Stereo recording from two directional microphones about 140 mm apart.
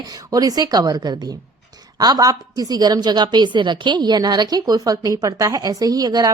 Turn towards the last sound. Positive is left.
turn(degrees=-30)  # may be behind; listen again after turning